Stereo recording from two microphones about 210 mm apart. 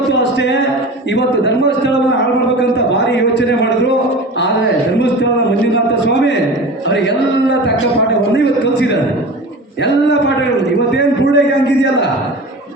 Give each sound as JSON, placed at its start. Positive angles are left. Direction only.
{"t": 0.2, "sound": "a sound", "side_deg": 55}
{"t": 1.1, "sound": "a man's voice", "side_deg": 55}
{"t": 6.1, "sound": "a man's voice", "side_deg": 55}
{"t": 8.4, "sound": "a man's voice", "side_deg": 55}